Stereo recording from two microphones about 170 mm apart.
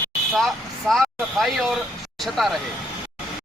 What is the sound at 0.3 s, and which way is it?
Speech, centre (ahead or behind).